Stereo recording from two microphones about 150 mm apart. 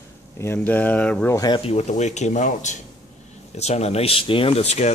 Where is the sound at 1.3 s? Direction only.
25° left (ahead or behind).